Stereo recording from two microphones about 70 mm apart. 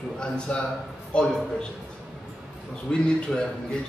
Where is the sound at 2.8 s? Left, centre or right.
Centre.